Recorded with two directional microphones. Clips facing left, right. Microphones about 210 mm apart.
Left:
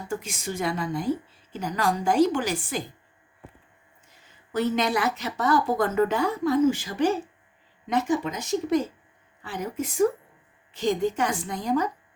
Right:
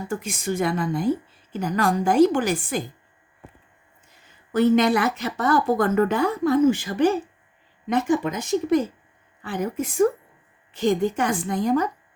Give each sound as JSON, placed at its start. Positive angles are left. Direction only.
{"t": 0.2, "sound": "a woman's voice", "side_deg": -55}
{"t": 4.5, "sound": "a woman's voice", "side_deg": -55}